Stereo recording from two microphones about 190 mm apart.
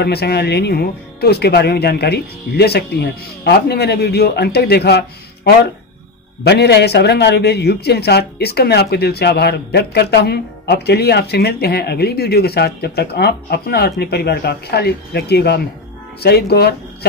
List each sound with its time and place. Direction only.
0.0 s a man's voice: 60° left (ahead or behind)